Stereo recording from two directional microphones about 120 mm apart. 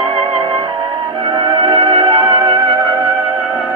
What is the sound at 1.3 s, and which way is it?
Music, 40° right (ahead or behind).